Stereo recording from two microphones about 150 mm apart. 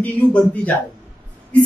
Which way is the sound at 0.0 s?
10° left (ahead or behind).